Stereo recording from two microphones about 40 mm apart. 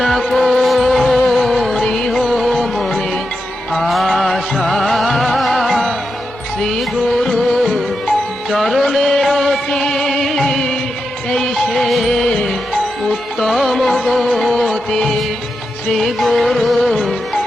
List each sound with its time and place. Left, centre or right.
0.0 s music: centre
7.3 s music: centre
9.6 s music: centre
11.5 s music: centre
13.4 s music: centre
14.3 s music of bollywood: centre
15.9 s music: centre